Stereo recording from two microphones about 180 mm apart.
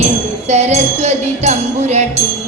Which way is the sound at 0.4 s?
40° right (ahead or behind).